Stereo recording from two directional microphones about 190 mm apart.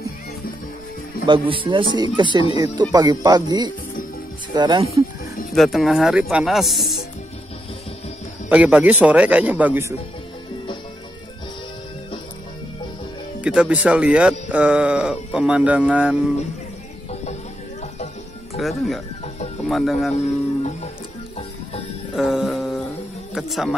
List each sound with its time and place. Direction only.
1.2 s speech: 25° right (ahead or behind)
5.5 s speech: centre (ahead or behind)
8.5 s speech: 10° right (ahead or behind)
13.4 s speech: 5° right (ahead or behind)
17.1 s music: 35° left (ahead or behind)
18.6 s speech: centre (ahead or behind)
22.1 s music: centre (ahead or behind)
23.3 s speech: centre (ahead or behind)